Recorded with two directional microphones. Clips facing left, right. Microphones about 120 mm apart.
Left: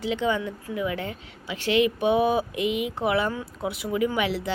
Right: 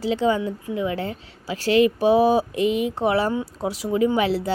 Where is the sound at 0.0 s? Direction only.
35° right (ahead or behind).